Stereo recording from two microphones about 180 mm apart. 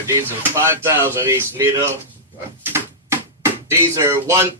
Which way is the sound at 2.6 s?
15° right (ahead or behind).